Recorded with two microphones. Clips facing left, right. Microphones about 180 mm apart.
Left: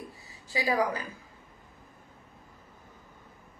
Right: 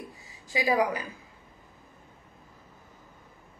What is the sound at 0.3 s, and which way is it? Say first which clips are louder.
Speech: right 3 dB; 15° right (ahead or behind).